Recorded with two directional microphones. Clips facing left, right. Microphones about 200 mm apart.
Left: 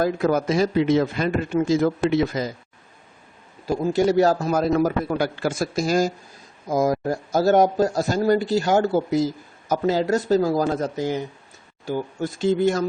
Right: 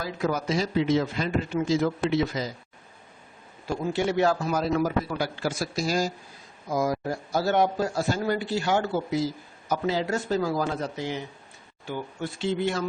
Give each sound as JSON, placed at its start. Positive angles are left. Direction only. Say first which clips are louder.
{"t": 0.0, "sound": "a man's voice", "louder": "left 8 dB", "side_deg": 50}
{"t": 3.7, "sound": "a man's voice", "louder": "left 7 dB", "side_deg": 40}